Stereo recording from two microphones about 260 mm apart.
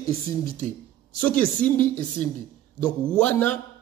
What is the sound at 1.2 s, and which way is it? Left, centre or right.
A man's voice, centre.